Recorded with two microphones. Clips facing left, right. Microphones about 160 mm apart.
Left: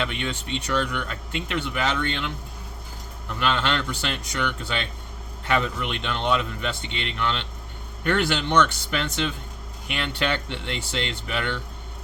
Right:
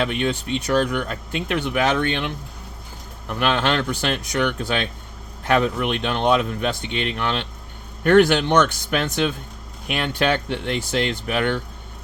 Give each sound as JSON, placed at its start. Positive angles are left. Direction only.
{"t": 0.0, "sound": "speech", "side_deg": -45}